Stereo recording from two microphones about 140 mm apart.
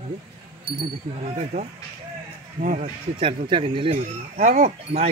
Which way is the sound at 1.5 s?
90° right.